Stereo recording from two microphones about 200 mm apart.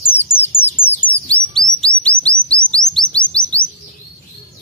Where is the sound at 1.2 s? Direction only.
5° left (ahead or behind).